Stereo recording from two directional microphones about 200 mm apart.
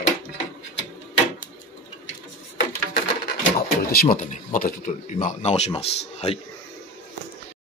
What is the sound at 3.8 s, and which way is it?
Speech, 50° left (ahead or behind).